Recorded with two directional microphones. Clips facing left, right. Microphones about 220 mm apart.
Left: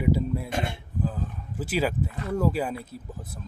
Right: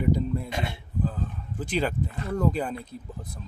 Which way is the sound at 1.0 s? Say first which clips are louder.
Left 1 dB; 5° left (ahead or behind).